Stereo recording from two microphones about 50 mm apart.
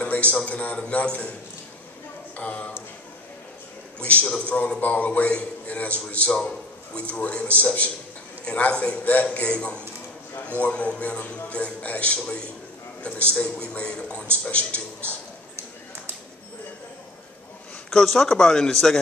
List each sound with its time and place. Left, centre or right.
0.0 s a sound: left
0.4 s a man's voice: left
2.3 s speech: left
4.0 s a man's voice: left
18.0 s speech: centre